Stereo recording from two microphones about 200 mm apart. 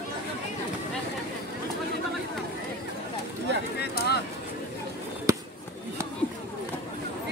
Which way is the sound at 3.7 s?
55° left (ahead or behind).